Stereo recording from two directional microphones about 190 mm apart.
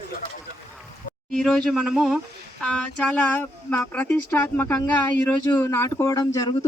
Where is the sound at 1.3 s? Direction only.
5° left (ahead or behind).